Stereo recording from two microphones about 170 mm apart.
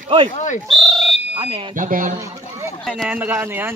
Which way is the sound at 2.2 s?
15° right (ahead or behind).